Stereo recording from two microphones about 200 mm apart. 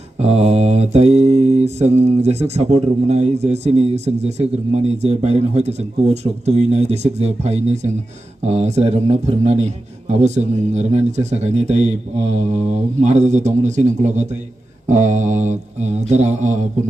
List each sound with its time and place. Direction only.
0.2 s mantra: 30° right (ahead or behind)